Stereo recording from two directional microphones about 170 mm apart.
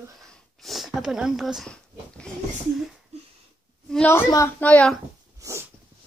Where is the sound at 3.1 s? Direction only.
40° right (ahead or behind).